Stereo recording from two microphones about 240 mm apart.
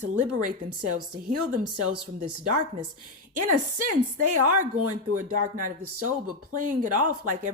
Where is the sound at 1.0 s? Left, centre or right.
Right.